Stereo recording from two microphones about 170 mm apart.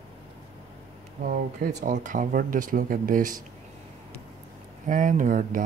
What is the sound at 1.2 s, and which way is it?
Speech, 55° right (ahead or behind).